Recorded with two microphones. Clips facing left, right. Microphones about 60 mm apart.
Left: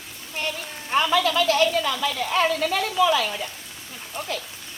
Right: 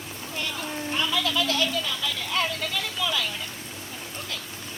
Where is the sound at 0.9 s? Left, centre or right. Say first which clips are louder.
Left 8 dB; left.